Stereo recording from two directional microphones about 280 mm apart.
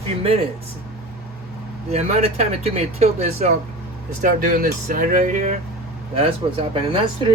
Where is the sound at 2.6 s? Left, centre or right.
Right.